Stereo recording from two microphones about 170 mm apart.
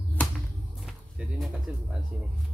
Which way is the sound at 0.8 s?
Centre (ahead or behind).